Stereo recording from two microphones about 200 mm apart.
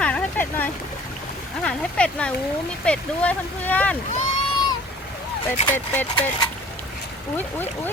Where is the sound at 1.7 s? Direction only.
5° left (ahead or behind).